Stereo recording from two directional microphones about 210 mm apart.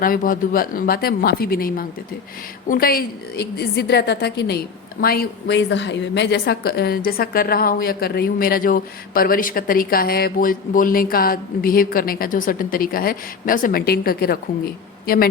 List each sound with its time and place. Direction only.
0.0 s a woman's voice: 40° left (ahead or behind)